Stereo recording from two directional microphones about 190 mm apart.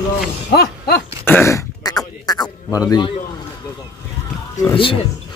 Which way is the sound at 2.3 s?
20° left (ahead or behind).